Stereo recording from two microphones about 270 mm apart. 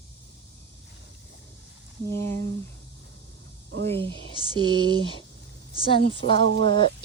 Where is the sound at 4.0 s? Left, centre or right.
Centre.